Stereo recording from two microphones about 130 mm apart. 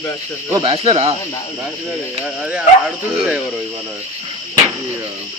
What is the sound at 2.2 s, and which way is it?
Speech, 10° right (ahead or behind).